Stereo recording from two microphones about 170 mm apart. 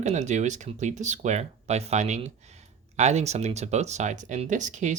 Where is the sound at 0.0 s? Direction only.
45° right (ahead or behind).